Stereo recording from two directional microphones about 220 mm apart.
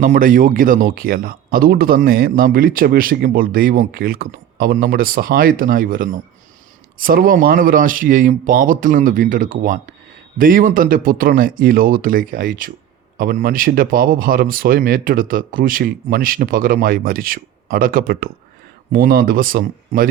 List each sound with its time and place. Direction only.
0.0 s speech: 35° right (ahead or behind)